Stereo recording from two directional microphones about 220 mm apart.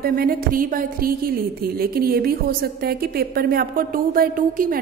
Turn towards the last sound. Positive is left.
turn(degrees=-40)  # may be behind; listen again after turning